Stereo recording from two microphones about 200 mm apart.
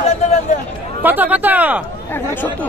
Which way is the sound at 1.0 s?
10° right (ahead or behind).